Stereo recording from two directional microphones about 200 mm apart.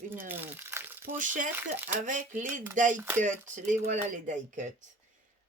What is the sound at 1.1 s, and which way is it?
Speech, 40° right (ahead or behind).